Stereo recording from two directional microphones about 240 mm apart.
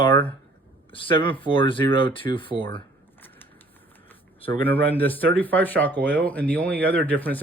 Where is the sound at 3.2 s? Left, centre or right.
Centre.